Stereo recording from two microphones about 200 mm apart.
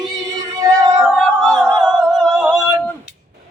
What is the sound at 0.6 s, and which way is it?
Music, 15° right (ahead or behind).